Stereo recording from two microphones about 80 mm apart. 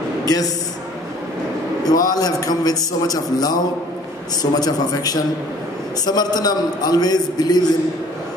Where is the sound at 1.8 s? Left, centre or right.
Left.